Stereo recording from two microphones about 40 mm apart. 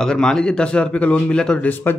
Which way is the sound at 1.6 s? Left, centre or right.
Left.